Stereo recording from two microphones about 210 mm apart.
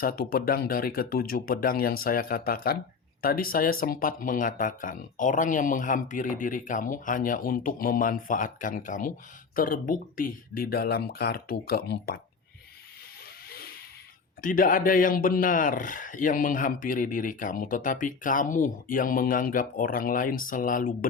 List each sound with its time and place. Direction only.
0.0 s speech: 45° left (ahead or behind)
13.5 s a sound: 45° left (ahead or behind)
14.4 s speech: 40° left (ahead or behind)